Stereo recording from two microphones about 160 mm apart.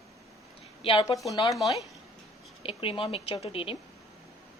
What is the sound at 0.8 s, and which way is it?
Speech, 35° left (ahead or behind).